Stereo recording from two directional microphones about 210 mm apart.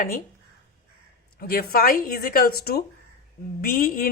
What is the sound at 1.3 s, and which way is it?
A woman's voice, 45° left (ahead or behind).